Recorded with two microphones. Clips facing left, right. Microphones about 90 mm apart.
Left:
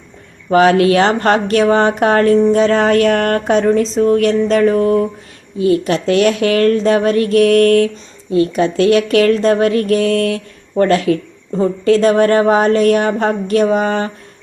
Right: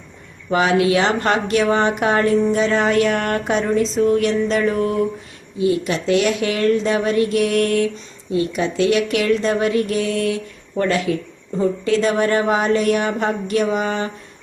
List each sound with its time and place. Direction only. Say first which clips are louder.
0.5 s speech: left 6 dB; 50° left (ahead or behind)